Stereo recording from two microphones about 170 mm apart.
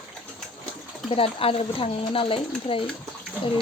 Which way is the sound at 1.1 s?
35° left (ahead or behind).